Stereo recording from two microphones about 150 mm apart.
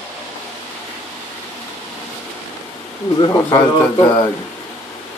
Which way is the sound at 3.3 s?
25° left (ahead or behind).